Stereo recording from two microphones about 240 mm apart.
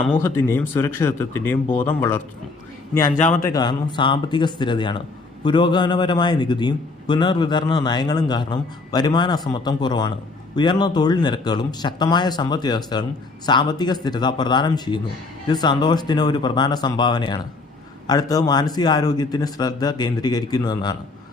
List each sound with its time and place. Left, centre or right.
0.2 s speech: centre